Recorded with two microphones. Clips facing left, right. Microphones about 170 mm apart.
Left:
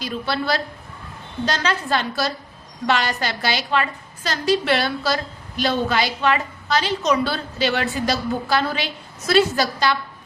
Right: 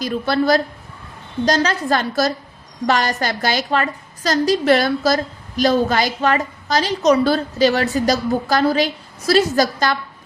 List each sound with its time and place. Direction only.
0.0 s a woman's voice: 45° right (ahead or behind)